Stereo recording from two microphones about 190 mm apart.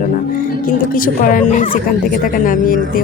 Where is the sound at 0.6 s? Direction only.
45° left (ahead or behind).